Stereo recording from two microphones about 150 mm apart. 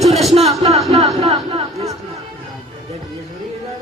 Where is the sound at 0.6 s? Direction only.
40° right (ahead or behind).